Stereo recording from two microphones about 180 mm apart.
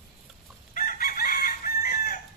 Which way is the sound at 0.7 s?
50° left (ahead or behind).